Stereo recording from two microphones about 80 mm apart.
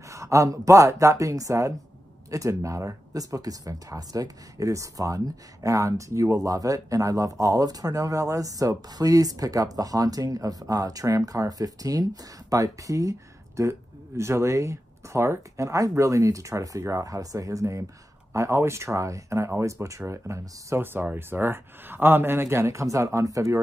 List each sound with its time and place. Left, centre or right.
0.1 s speech: right